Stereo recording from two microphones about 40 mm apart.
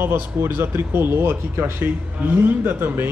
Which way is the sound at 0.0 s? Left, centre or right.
Right.